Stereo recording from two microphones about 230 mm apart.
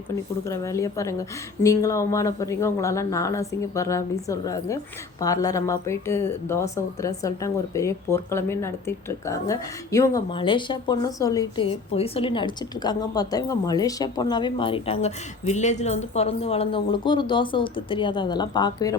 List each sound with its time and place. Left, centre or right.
0.4 s a woman's voice: centre